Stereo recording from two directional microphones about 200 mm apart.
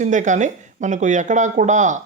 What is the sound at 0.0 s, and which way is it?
Speech, 40° right (ahead or behind).